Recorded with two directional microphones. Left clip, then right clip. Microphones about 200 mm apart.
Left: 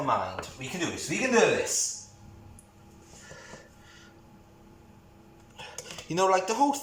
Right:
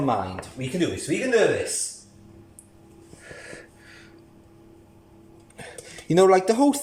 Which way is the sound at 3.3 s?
60° right (ahead or behind).